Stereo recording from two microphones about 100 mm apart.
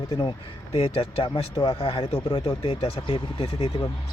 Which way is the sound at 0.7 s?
65° left (ahead or behind).